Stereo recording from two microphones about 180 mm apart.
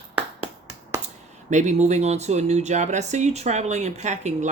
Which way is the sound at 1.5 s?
40° right (ahead or behind).